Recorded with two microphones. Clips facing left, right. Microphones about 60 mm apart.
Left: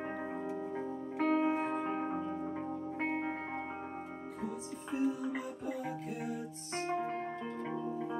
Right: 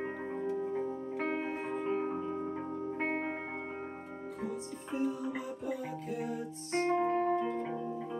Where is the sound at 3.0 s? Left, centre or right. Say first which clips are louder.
Right 1 dB; right.